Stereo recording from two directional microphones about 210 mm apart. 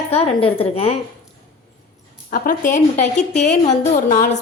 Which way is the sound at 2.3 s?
40° left (ahead or behind).